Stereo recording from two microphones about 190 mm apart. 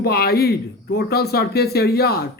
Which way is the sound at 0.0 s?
55° left (ahead or behind).